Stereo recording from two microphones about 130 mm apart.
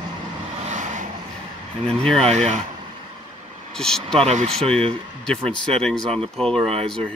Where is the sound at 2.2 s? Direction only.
60° right (ahead or behind).